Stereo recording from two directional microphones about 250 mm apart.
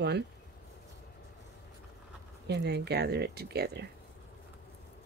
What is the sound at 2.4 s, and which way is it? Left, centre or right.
Speech, right.